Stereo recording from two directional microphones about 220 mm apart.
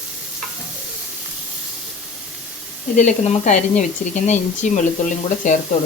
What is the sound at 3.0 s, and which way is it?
Speech, 35° left (ahead or behind).